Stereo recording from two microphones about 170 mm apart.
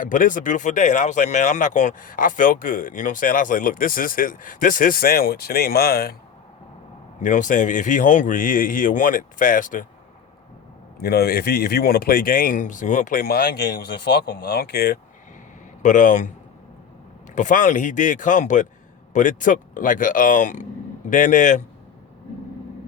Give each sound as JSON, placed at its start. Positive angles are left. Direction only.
{"t": 0.0, "sound": "speech", "side_deg": 50}
{"t": 7.2, "sound": "speech", "side_deg": 50}
{"t": 11.0, "sound": "speech", "side_deg": 65}
{"t": 15.8, "sound": "speech", "side_deg": 50}
{"t": 17.3, "sound": "speech", "side_deg": 50}